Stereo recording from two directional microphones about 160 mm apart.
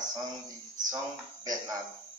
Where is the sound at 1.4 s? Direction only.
25° right (ahead or behind).